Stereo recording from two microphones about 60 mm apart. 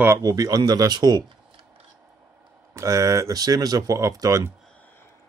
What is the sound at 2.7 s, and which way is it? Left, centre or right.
Speech, right.